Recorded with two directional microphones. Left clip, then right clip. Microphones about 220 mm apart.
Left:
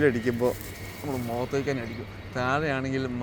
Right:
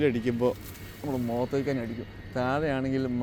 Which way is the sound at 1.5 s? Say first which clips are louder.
Left 1 dB; 35° right (ahead or behind).